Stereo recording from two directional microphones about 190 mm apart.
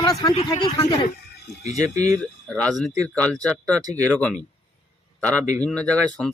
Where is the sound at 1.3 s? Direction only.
60° left (ahead or behind).